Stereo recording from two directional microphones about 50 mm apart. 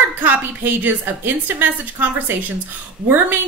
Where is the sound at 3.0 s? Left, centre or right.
Right.